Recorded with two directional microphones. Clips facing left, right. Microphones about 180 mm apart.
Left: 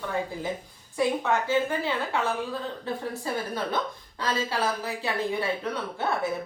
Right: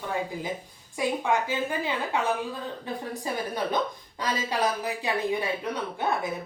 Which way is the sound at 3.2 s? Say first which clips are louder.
Even; 15° right (ahead or behind).